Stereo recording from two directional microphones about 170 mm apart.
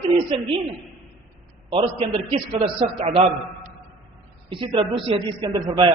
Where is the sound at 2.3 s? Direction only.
35° right (ahead or behind).